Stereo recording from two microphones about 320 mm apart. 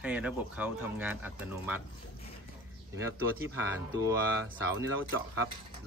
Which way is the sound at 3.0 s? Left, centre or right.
Centre.